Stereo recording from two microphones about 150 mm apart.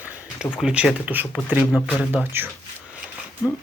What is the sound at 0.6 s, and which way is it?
Speech, 5° right (ahead or behind).